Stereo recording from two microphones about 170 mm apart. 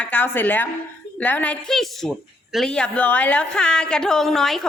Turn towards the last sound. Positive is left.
turn(degrees=0)  # may be behind; listen again after turning